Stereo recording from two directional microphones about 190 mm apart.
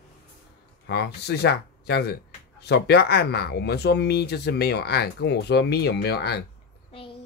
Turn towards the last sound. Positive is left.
turn(degrees=60)  # may be behind; listen again after turning